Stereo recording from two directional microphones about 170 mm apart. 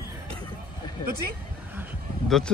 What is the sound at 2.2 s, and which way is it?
Speech, centre (ahead or behind).